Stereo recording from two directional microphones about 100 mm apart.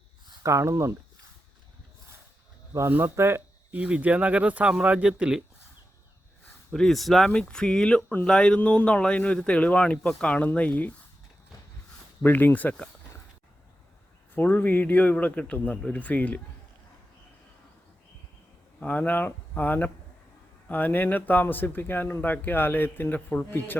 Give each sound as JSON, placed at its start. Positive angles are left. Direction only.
{"t": 0.4, "sound": "speech", "side_deg": -30}
{"t": 2.9, "sound": "speech", "side_deg": -25}
{"t": 6.7, "sound": "speech", "side_deg": 0}
{"t": 12.2, "sound": "speech", "side_deg": 20}
{"t": 14.3, "sound": "speech", "side_deg": 20}
{"t": 18.8, "sound": "speech", "side_deg": 15}